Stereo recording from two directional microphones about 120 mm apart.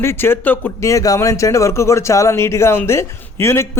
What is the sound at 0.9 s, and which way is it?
Speech, 25° left (ahead or behind).